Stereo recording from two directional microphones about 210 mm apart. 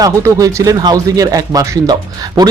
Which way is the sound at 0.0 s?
15° right (ahead or behind).